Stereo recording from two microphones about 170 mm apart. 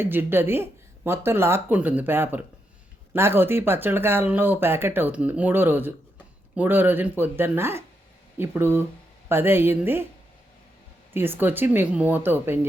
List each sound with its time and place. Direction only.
0.0 s speech: 15° right (ahead or behind)
11.1 s speech: 15° right (ahead or behind)